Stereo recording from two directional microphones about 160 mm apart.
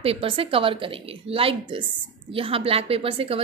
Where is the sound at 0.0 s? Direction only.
35° right (ahead or behind).